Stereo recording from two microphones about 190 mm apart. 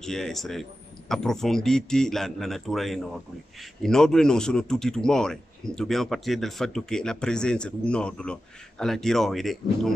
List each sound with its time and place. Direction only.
0.0 s speech: centre (ahead or behind)